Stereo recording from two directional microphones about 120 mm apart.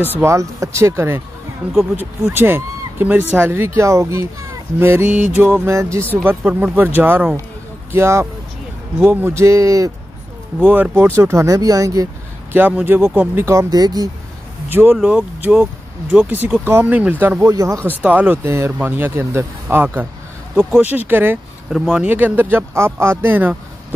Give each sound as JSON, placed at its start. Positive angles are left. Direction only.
{"t": 0.2, "sound": "speech", "side_deg": -25}
{"t": 1.6, "sound": "speech", "side_deg": -10}
{"t": 2.3, "sound": "speech", "side_deg": -20}
{"t": 6.2, "sound": "speech", "side_deg": -15}
{"t": 10.6, "sound": "speech", "side_deg": -15}
{"t": 12.5, "sound": "speech", "side_deg": -15}
{"t": 14.7, "sound": "speech", "side_deg": -15}
{"t": 18.0, "sound": "speech", "side_deg": -15}
{"t": 21.6, "sound": "speech", "side_deg": -5}